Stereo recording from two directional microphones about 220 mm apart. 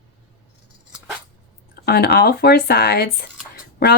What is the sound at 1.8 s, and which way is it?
Speech, 45° left (ahead or behind).